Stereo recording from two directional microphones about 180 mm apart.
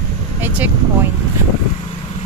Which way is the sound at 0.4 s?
10° right (ahead or behind).